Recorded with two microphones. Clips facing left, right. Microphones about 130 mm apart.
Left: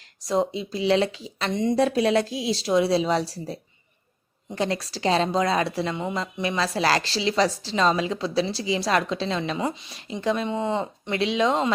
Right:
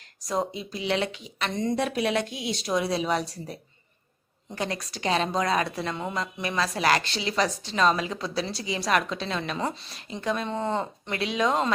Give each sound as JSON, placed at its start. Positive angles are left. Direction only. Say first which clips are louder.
{"t": 0.2, "sound": "a woman's voice", "louder": "left 5 dB", "side_deg": 25}
{"t": 5.9, "sound": "a woman's voice", "louder": "left 2 dB", "side_deg": 15}
{"t": 9.6, "sound": "speech", "louder": "left 2 dB", "side_deg": 10}
{"t": 9.9, "sound": "a woman's voice", "louder": "left 4 dB", "side_deg": 30}
{"t": 10.5, "sound": "speech", "louder": "left 2 dB", "side_deg": 5}
{"t": 11.0, "sound": "a woman's voice", "louder": "left 5 dB", "side_deg": 25}